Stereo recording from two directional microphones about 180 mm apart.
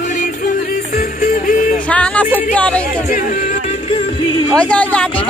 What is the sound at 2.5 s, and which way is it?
Speech, 5° left (ahead or behind).